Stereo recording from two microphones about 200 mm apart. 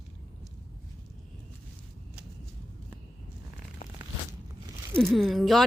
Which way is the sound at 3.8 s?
45° left (ahead or behind).